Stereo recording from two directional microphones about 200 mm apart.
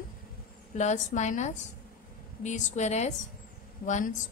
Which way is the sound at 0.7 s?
35° left (ahead or behind).